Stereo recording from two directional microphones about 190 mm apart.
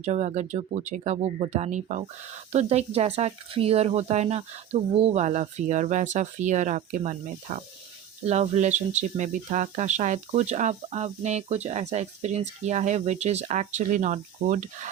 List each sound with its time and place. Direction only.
0.0 s speech: 35° right (ahead or behind)